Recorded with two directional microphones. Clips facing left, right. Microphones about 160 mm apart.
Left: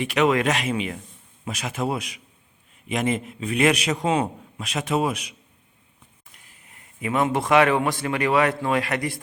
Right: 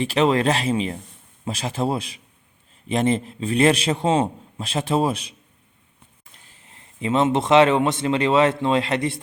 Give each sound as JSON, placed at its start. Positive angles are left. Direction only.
{"t": 0.0, "sound": "a man's voice", "side_deg": -30}
{"t": 6.3, "sound": "speech", "side_deg": -30}